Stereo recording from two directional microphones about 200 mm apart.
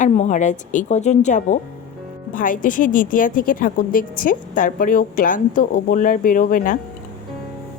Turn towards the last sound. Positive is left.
turn(degrees=45)  # may be behind; listen again after turning